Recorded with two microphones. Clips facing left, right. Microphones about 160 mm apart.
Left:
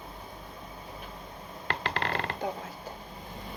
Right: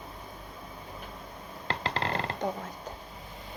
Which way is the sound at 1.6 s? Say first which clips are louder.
Even; 30° right (ahead or behind).